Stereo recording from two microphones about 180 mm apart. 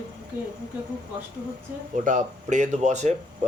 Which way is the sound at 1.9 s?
45° right (ahead or behind).